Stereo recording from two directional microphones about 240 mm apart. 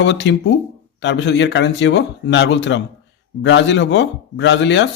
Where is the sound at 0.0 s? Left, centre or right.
Left.